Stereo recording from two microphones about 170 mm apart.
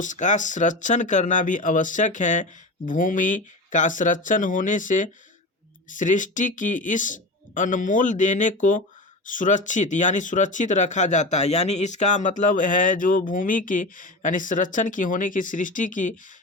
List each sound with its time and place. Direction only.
0.0 s speech: 45° left (ahead or behind)